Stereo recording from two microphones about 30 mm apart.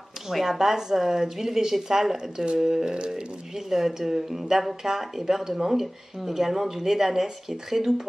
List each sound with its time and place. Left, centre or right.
0.3 s speech: centre; by 3.1 s right
3.5 s speech: centre